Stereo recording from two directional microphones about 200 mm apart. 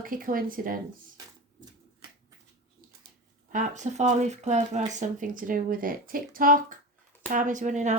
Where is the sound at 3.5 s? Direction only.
40° right (ahead or behind).